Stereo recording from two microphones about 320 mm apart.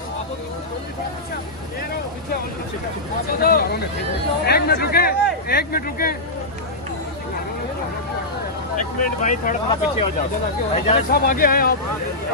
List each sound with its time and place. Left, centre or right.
3.3 s speech: left
8.7 s speech: left